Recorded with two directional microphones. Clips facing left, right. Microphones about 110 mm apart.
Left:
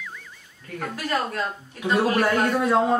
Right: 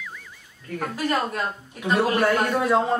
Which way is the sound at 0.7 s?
15° right (ahead or behind).